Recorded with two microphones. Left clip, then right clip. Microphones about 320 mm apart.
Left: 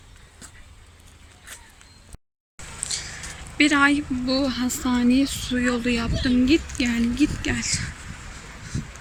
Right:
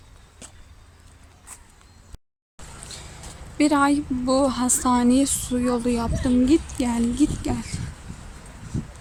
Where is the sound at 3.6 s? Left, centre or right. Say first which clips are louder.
Left 1 dB; centre.